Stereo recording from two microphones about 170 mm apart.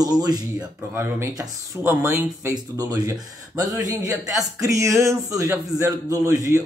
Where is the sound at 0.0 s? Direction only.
25° right (ahead or behind).